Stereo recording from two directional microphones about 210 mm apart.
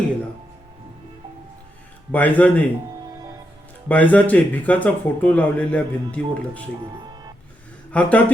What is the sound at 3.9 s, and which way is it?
Speech, 5° left (ahead or behind).